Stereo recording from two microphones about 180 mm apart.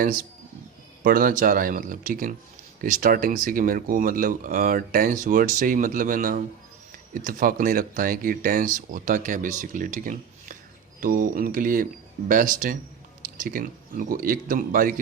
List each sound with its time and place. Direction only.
1.0 s speech: 55° right (ahead or behind)